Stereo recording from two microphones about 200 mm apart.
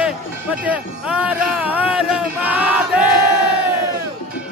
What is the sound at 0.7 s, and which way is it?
Music, 5° right (ahead or behind).